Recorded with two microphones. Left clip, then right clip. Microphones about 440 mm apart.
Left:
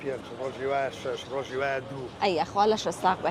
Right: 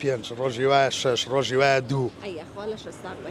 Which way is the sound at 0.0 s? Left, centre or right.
Right.